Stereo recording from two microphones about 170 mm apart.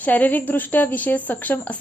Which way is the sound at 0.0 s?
10° left (ahead or behind).